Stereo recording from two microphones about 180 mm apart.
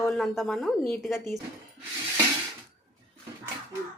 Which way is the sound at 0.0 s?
Centre (ahead or behind).